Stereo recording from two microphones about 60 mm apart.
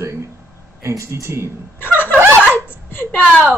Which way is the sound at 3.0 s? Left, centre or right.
Left.